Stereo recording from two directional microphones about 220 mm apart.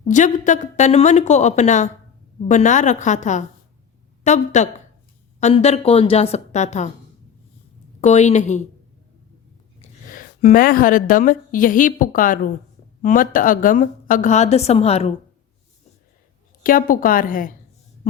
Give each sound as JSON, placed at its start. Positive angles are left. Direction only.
{"t": 0.1, "sound": "a woman's voice", "side_deg": 35}
{"t": 8.0, "sound": "a woman's voice", "side_deg": 30}
{"t": 10.1, "sound": "a woman's voice", "side_deg": 40}
{"t": 16.6, "sound": "a woman's voice", "side_deg": 40}